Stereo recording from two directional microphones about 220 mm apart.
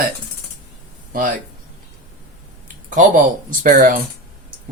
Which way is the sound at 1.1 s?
40° right (ahead or behind).